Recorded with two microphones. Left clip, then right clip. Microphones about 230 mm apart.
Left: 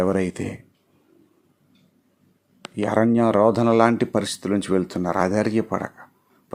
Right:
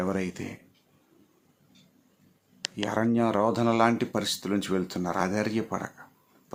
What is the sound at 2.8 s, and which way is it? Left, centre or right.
Speech, left.